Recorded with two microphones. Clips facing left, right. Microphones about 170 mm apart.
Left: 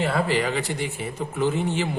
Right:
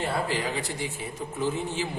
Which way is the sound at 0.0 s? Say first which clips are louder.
Left 5 dB; 80° left.